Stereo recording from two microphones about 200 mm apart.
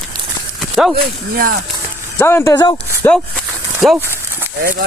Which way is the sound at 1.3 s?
45° right (ahead or behind).